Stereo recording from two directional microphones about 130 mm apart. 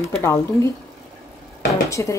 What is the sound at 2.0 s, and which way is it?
Speech, 20° left (ahead or behind).